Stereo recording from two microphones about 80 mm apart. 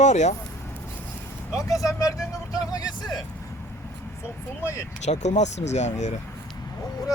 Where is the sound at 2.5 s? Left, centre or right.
Left.